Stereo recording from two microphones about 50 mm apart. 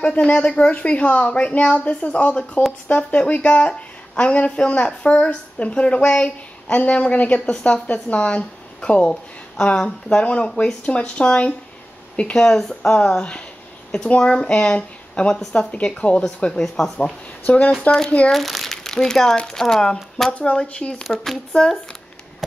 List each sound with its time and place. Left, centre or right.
0.0 s a woman's voice: left
13.9 s a woman's voice: centre
17.9 s speech: left
18.3 s crumpling: centre
19.2 s speech: centre
20.5 s a woman's voice: centre
21.0 s speech: centre